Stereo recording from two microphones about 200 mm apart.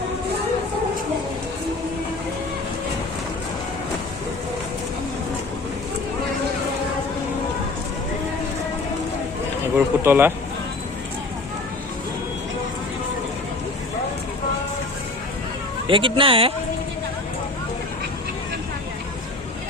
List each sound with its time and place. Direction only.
9.7 s speech: 10° right (ahead or behind)
15.9 s a man's voice: 25° right (ahead or behind)